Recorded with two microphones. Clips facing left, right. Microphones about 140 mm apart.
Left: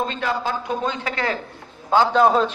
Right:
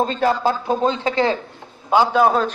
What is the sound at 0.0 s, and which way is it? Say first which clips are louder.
Speech: right 6 dB; 35° right (ahead or behind).